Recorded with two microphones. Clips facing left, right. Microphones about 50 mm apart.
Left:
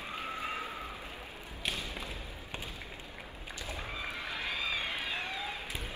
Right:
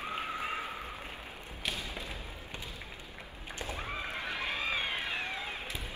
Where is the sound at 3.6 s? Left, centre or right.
Right.